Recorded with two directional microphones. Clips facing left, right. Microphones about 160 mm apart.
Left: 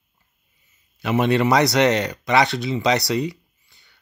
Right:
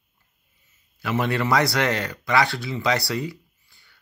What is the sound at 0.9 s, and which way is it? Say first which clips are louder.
Speech: left 5 dB; 20° left (ahead or behind).